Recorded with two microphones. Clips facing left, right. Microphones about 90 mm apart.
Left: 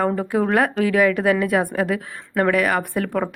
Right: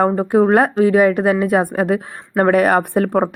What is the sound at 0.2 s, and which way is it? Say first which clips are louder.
A woman's voice: right 6 dB; 35° right (ahead or behind).